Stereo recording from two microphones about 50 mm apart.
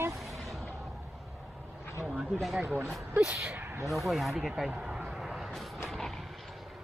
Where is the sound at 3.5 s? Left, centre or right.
Right.